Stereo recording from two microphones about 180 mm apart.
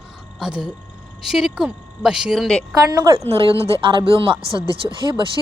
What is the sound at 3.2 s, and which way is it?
Speech, 30° right (ahead or behind).